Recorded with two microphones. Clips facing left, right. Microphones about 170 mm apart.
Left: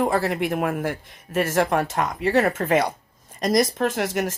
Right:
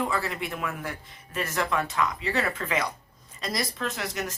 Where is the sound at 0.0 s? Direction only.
55° left (ahead or behind).